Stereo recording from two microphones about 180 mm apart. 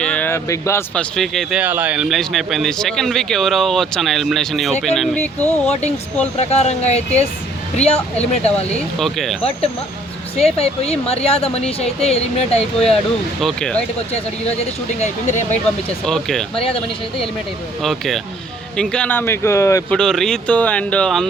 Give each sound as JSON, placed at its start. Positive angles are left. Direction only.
{"t": 0.0, "sound": "speech", "side_deg": 5}
{"t": 5.5, "sound": "speech", "side_deg": 35}
{"t": 9.0, "sound": "speech", "side_deg": 0}
{"t": 10.3, "sound": "speech", "side_deg": 35}
{"t": 13.4, "sound": "speech", "side_deg": 5}
{"t": 14.9, "sound": "speech", "side_deg": 40}
{"t": 16.0, "sound": "speech", "side_deg": 0}
{"t": 17.8, "sound": "speech", "side_deg": 0}
{"t": 19.9, "sound": "speech", "side_deg": 5}